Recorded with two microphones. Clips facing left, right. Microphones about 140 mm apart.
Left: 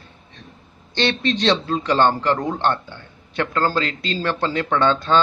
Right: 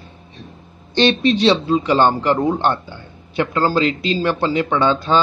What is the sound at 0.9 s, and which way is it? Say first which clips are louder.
A man's voice: right 6 dB; 15° right (ahead or behind).